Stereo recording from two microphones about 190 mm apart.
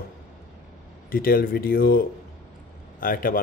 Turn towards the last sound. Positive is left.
turn(degrees=50)  # may be behind; listen again after turning